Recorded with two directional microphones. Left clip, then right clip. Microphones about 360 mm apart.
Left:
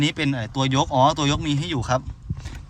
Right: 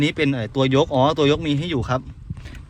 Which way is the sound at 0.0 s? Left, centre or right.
Centre.